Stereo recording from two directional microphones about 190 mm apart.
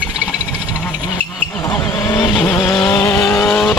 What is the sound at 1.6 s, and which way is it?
Vehicle, 20° left (ahead or behind).